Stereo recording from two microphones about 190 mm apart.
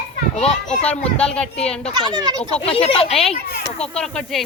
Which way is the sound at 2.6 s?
30° left (ahead or behind).